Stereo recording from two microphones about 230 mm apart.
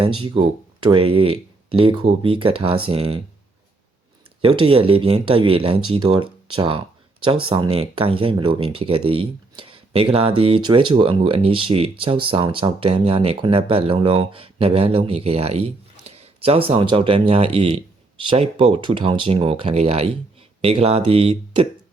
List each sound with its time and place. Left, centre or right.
0.3 s speech: right
4.7 s speech: right